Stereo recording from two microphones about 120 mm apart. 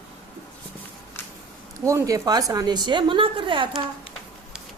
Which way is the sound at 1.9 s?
25° right (ahead or behind).